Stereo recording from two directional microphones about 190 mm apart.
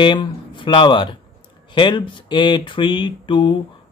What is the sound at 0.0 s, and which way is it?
Speech, 25° left (ahead or behind).